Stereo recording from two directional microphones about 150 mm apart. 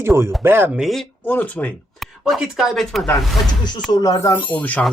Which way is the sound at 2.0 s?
Centre (ahead or behind).